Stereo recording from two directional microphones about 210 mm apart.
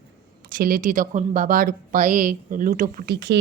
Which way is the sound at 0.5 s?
40° right (ahead or behind).